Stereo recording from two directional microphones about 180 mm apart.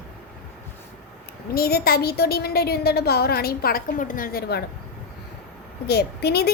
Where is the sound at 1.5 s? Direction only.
60° left (ahead or behind).